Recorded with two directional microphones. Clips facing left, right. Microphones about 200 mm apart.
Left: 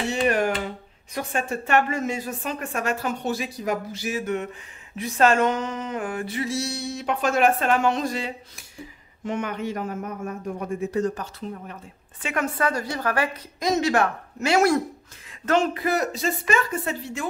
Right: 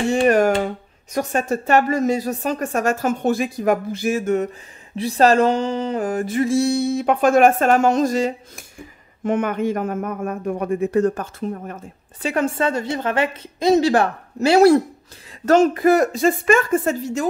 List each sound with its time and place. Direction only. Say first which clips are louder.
0.1 s speech: right 7 dB; 45° right (ahead or behind)
4.9 s speech: right 5 dB; 35° right (ahead or behind)
15.4 s speech: right 8 dB; 45° right (ahead or behind)